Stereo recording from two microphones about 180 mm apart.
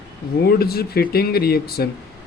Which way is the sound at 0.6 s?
60° left (ahead or behind).